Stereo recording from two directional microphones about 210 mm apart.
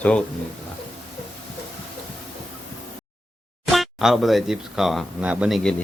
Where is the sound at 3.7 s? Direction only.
Centre (ahead or behind).